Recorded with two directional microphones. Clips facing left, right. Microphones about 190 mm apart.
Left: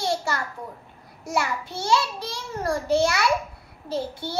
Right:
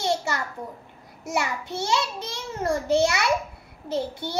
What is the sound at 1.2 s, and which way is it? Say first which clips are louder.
A child's voice: left 1 dB; 20° right (ahead or behind).